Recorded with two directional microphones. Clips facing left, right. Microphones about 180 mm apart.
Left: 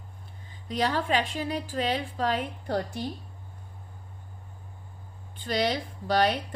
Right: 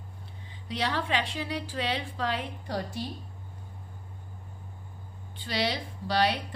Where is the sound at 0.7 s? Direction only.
45° left (ahead or behind).